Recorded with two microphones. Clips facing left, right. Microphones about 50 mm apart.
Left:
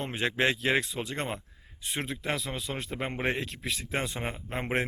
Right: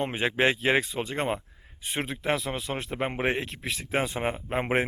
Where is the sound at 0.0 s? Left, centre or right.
Centre.